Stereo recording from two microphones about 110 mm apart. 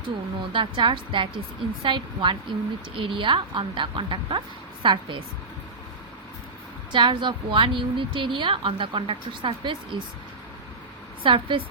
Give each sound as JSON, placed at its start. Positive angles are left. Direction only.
{"t": 0.5, "sound": "a woman's voice", "side_deg": -50}
{"t": 6.9, "sound": "a woman's voice", "side_deg": -45}
{"t": 11.2, "sound": "a woman's voice", "side_deg": -50}